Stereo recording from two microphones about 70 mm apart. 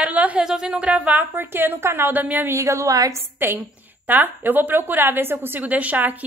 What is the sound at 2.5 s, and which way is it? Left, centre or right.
Speech, right.